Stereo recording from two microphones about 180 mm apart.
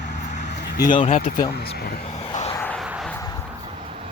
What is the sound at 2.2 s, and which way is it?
Vehicle, 35° left (ahead or behind).